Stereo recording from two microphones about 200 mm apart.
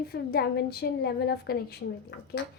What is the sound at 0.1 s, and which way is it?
A child's voice, 50° left (ahead or behind).